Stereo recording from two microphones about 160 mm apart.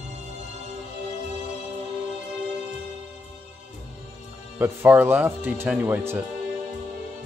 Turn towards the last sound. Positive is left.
turn(degrees=-10)  # may be behind; listen again after turning